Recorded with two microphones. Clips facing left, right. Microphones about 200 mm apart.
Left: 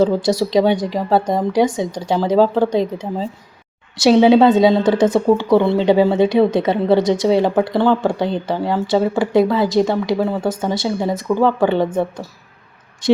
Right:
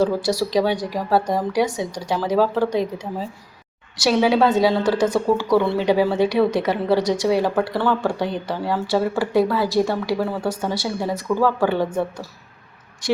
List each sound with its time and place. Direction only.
0.0 s a woman's voice: 20° left (ahead or behind)